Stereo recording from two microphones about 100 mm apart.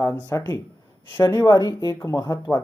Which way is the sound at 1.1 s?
20° left (ahead or behind).